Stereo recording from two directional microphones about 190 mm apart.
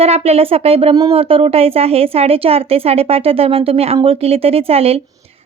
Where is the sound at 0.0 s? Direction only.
30° right (ahead or behind).